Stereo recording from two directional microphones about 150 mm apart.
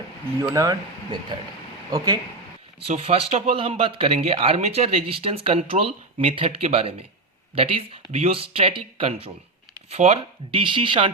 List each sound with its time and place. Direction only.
0.5 s speech: 25° right (ahead or behind)
2.8 s a man's voice: 40° right (ahead or behind)